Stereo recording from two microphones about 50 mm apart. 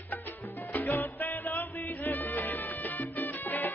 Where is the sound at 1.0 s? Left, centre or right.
Left.